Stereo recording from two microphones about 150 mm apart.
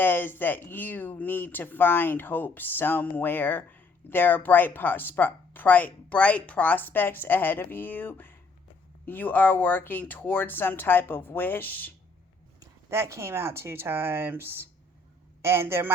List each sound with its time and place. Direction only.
0.0 s speech: 15° left (ahead or behind)
12.5 s speech: 20° right (ahead or behind)